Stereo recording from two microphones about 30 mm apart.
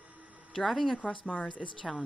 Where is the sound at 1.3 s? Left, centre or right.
Left.